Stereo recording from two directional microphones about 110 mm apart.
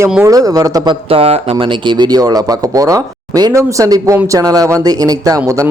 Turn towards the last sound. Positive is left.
turn(degrees=-35)  # may be behind; listen again after turning